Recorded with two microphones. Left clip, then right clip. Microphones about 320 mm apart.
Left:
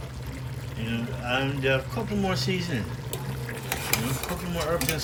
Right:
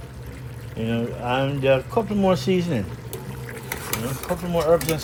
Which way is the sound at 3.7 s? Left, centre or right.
Centre.